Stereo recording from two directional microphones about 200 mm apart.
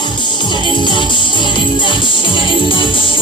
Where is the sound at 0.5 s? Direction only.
25° left (ahead or behind).